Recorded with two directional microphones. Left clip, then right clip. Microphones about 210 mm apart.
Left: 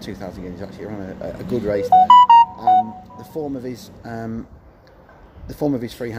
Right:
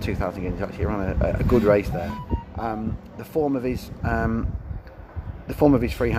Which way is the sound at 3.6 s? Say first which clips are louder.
Right 4 dB; 5° right (ahead or behind).